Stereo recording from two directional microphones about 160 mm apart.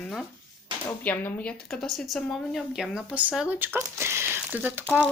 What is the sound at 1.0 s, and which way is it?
Speech, 10° left (ahead or behind).